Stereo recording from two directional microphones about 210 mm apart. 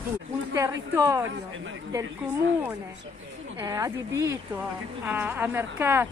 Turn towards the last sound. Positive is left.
turn(degrees=-10)  # may be behind; listen again after turning